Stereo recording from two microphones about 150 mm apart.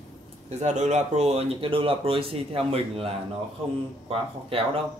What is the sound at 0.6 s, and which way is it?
Speech, 50° right (ahead or behind).